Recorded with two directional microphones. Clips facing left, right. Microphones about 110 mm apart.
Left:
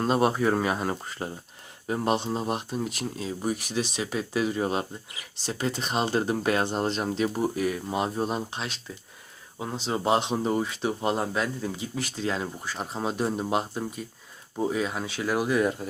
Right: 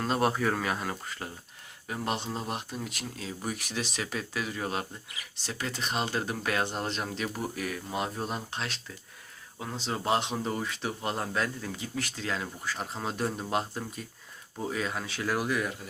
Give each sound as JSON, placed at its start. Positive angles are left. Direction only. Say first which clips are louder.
{"t": 0.1, "sound": "speech", "louder": "left 4 dB", "side_deg": 15}
{"t": 15.4, "sound": "speech", "louder": "left 7 dB", "side_deg": 30}